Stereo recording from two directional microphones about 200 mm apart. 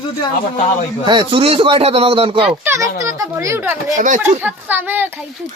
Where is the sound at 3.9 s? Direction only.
40° right (ahead or behind).